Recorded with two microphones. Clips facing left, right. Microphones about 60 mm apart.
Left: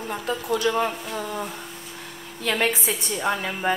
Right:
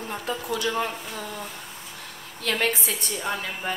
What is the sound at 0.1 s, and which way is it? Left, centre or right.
A woman's voice, centre.